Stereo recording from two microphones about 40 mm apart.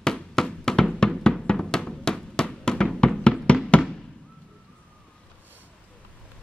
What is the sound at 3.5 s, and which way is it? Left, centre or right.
Fireworks, left.